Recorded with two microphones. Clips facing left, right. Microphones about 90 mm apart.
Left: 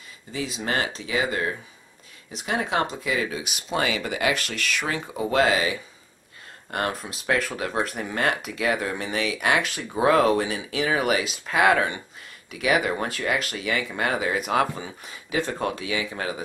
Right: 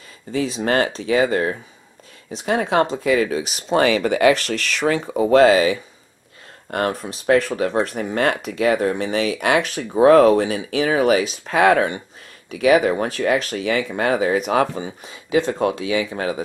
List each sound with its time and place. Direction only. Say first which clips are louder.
0.3 s speech: right 8 dB; 45° right (ahead or behind)
2.3 s speech: right 6 dB; 30° right (ahead or behind)
2.6 s speech: right 8 dB; 40° right (ahead or behind)
6.7 s speech: right 5 dB; 35° right (ahead or behind)
14.8 s speech: right 6 dB; 25° right (ahead or behind)